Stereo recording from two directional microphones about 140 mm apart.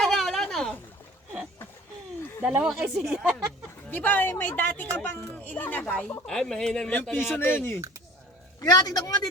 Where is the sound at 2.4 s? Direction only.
10° right (ahead or behind).